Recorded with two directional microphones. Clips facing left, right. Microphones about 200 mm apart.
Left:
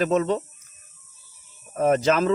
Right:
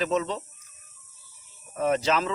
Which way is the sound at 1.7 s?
50° left (ahead or behind).